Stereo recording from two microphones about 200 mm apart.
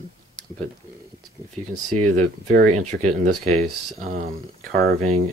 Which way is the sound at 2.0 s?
40° right (ahead or behind).